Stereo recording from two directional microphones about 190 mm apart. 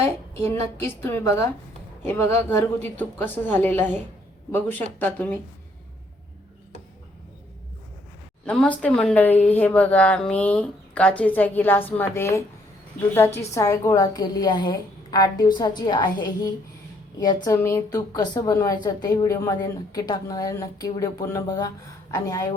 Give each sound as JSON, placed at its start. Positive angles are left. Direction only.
{"t": 0.3, "sound": "speech", "side_deg": 15}
{"t": 8.4, "sound": "a woman's voice", "side_deg": 5}